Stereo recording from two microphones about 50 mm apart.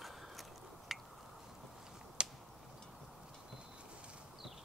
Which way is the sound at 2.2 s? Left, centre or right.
Centre.